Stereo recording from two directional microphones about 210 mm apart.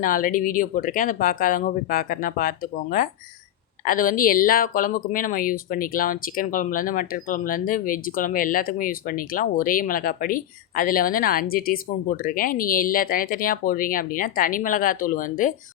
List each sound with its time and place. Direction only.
0.0 s speech: 40° left (ahead or behind)